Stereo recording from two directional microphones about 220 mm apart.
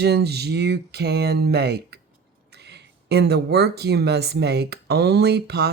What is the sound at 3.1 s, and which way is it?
Speech, 50° right (ahead or behind).